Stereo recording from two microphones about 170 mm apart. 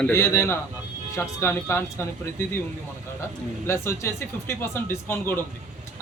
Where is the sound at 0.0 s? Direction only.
15° left (ahead or behind).